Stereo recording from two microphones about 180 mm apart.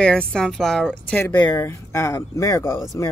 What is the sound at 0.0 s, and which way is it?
Speech, 5° left (ahead or behind).